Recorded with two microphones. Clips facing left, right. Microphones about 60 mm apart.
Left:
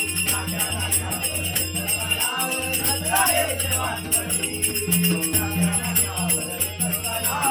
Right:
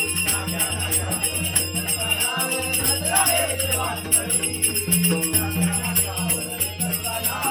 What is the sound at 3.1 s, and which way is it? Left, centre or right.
Music, centre.